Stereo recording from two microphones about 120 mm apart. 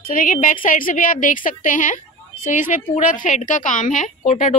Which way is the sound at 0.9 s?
90° left.